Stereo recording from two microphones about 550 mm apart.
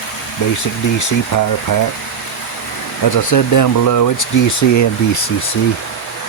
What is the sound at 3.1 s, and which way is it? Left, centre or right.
Speech, left.